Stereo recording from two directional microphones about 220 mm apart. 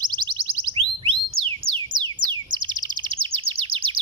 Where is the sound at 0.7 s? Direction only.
25° right (ahead or behind).